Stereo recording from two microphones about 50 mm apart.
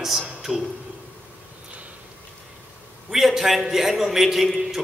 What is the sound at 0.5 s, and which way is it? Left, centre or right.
Speech, centre.